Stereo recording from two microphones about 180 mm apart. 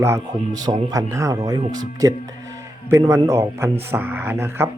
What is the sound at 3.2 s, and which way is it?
Speech, 15° right (ahead or behind).